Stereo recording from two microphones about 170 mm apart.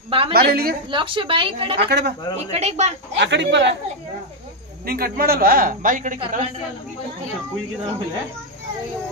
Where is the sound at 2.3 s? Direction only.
40° right (ahead or behind).